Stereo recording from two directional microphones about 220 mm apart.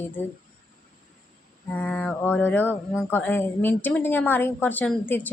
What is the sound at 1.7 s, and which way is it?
A woman's voice, 5° left (ahead or behind).